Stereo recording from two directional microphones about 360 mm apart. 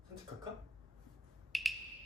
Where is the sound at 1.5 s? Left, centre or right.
Centre.